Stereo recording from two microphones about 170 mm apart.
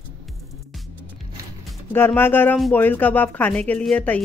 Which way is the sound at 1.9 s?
15° left (ahead or behind).